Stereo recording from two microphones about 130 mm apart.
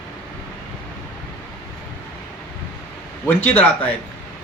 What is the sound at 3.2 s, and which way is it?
Speech, 15° left (ahead or behind).